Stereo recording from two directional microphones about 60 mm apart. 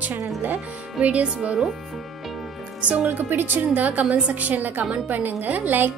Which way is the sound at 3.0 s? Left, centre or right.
Right.